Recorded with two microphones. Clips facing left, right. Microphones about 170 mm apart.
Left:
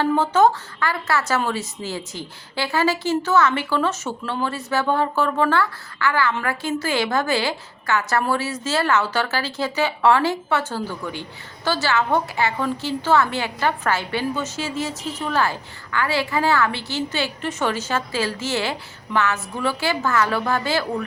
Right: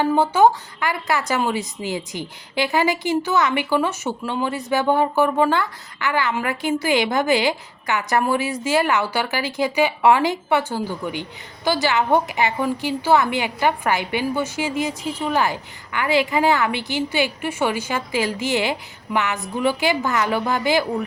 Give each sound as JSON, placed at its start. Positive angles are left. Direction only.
{"t": 0.0, "sound": "a woman's voice", "side_deg": -10}